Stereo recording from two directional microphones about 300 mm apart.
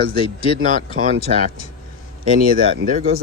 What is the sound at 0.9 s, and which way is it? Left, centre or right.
Speech, right.